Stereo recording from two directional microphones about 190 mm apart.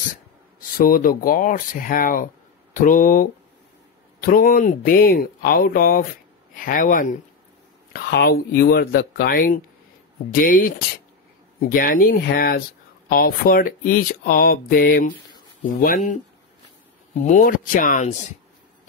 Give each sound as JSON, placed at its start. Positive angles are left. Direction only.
{"t": 0.6, "sound": "speech", "side_deg": 50}
{"t": 11.7, "sound": "speech", "side_deg": 50}
{"t": 17.3, "sound": "speech", "side_deg": 45}